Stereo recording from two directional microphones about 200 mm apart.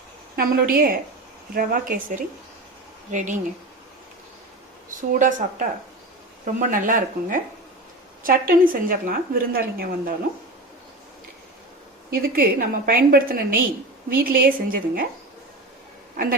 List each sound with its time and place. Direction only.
0.3 s a woman's voice: 50° right (ahead or behind)
4.9 s a woman's voice: 40° right (ahead or behind)
12.1 s a woman's voice: 50° right (ahead or behind)